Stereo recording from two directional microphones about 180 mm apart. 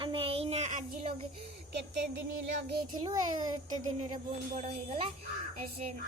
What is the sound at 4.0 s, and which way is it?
Speech, 35° right (ahead or behind).